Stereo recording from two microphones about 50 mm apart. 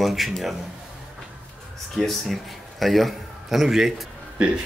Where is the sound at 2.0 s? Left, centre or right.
Centre.